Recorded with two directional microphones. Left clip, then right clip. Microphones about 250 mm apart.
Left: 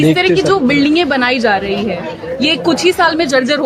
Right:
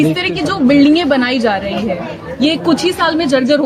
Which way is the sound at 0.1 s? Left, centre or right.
Centre.